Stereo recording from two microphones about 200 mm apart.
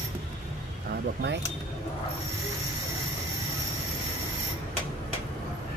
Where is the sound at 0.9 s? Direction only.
55° right (ahead or behind).